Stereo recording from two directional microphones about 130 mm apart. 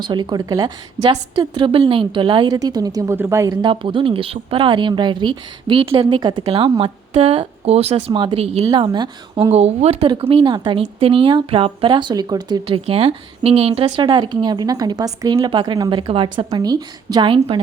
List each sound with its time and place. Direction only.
0.0 s a woman's voice: 35° right (ahead or behind)
3.6 s a woman's voice: 40° right (ahead or behind)
6.4 s speech: 50° right (ahead or behind)
8.6 s a woman's voice: 35° right (ahead or behind)
9.5 s a woman's voice: 55° right (ahead or behind); by 12.6 s 30° right (ahead or behind)
12.6 s speech: 45° right (ahead or behind)
13.8 s a woman's voice: 35° right (ahead or behind)
16.4 s a woman's voice: 30° right (ahead or behind)